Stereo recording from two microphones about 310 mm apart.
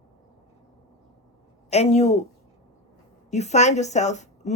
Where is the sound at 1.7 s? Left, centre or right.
Left.